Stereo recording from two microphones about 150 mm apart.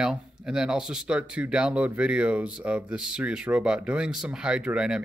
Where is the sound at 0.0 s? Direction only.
5° right (ahead or behind).